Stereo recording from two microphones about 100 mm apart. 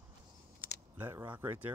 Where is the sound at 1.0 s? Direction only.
20° right (ahead or behind).